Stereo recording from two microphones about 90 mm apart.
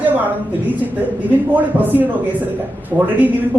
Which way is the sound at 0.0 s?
20° right (ahead or behind).